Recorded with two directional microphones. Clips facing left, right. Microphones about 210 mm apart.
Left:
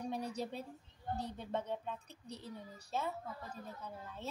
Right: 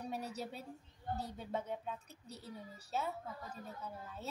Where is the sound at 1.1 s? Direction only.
5° right (ahead or behind).